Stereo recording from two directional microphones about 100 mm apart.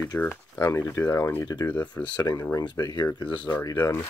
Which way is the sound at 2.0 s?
25° left (ahead or behind).